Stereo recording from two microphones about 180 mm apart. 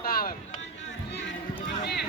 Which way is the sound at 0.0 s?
55° left (ahead or behind).